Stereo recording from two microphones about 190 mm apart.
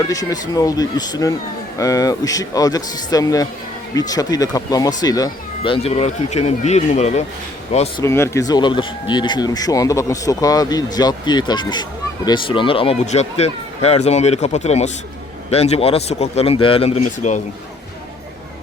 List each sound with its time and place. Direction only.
0.1 s speech: 20° left (ahead or behind); by 8.0 s 35° left (ahead or behind)
8.0 s speech: 15° left (ahead or behind); by 17.4 s 35° left (ahead or behind)